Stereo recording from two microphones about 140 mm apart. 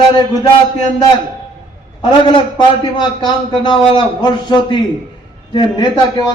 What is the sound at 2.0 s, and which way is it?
A man's voice, 30° left (ahead or behind).